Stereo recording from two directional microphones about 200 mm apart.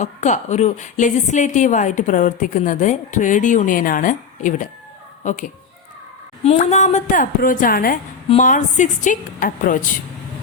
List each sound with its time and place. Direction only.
0.0 s a woman's voice: 35° left (ahead or behind)